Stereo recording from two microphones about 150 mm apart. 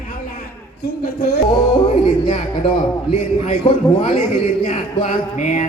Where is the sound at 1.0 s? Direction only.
90° left.